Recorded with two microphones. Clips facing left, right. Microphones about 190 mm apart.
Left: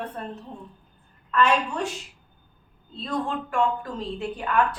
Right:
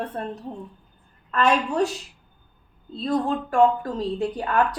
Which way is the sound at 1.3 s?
40° right (ahead or behind).